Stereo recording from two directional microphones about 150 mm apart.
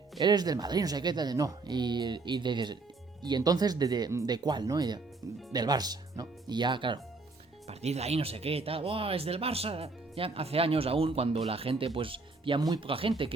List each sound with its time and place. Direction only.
0.2 s speech: 25° right (ahead or behind)
7.7 s speech: 45° right (ahead or behind)